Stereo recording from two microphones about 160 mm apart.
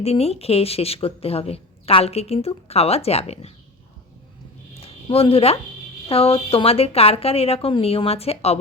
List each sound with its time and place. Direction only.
0.0 s speech: 40° left (ahead or behind)
4.7 s a sound: 35° left (ahead or behind)
6.1 s speech: 35° left (ahead or behind)